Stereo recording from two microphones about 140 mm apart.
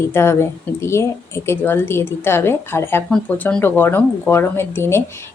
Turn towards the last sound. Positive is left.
turn(degrees=20)  # may be behind; listen again after turning